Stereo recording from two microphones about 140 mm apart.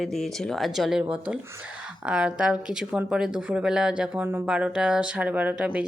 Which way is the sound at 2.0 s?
5° right (ahead or behind).